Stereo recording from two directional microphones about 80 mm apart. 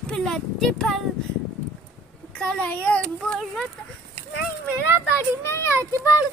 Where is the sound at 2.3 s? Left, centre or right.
Centre.